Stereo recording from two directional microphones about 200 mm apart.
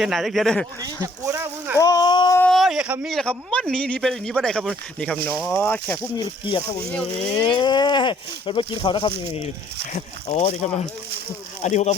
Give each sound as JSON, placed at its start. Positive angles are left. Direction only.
{"t": 0.0, "sound": "speech", "side_deg": 0}
{"t": 1.0, "sound": "speech", "side_deg": -15}
{"t": 1.8, "sound": "a sound", "side_deg": 20}
{"t": 2.4, "sound": "speech", "side_deg": 0}
{"t": 6.1, "sound": "speech", "side_deg": 25}